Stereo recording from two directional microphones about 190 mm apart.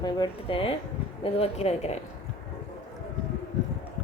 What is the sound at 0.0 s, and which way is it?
Speech, 25° left (ahead or behind).